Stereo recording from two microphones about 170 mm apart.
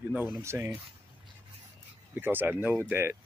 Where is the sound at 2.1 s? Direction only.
10° right (ahead or behind).